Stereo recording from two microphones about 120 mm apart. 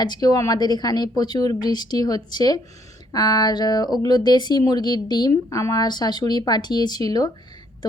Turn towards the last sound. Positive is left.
turn(degrees=35)  # may be behind; listen again after turning